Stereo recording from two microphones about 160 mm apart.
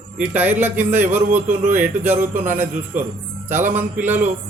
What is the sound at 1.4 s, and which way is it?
Speech, 50° right (ahead or behind).